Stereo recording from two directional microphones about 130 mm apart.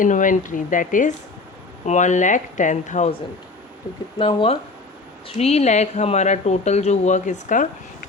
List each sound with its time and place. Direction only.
0.0 s speech: 90° left
1.8 s speech: 65° left (ahead or behind)
4.2 s speech: 40° left (ahead or behind)
5.4 s speech: 55° left (ahead or behind); by 7.7 s 80° left